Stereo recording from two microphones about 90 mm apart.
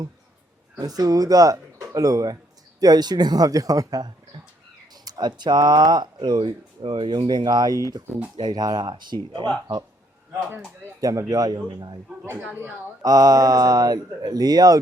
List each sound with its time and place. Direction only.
0.8 s speech: 45° right (ahead or behind)
11.0 s speech: 40° right (ahead or behind)
13.0 s speech: 45° right (ahead or behind)